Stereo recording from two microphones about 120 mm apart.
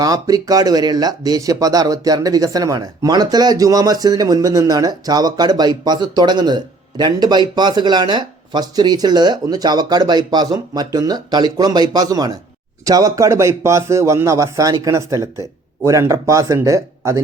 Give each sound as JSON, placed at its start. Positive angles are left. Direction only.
{"t": 0.0, "sound": "a man's voice", "side_deg": -30}